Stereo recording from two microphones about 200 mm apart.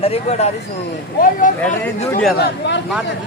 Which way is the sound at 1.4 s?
40° left (ahead or behind).